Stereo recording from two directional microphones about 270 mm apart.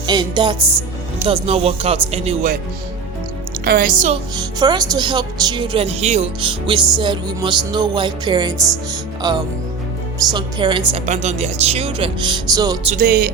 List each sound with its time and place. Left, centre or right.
0.1 s speech: centre
3.6 s speech: right
4.6 s speech: centre
13.0 s speech: right